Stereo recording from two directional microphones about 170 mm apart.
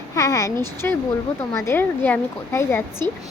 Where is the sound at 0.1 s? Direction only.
20° left (ahead or behind).